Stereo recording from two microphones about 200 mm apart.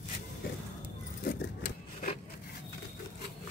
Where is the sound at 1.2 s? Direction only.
45° left (ahead or behind).